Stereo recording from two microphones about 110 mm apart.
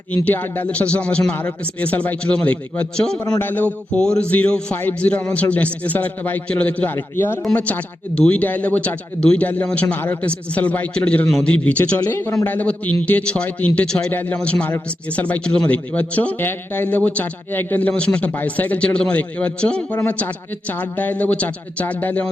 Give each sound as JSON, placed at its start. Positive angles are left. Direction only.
{"t": 0.1, "sound": "a man's voice", "side_deg": 15}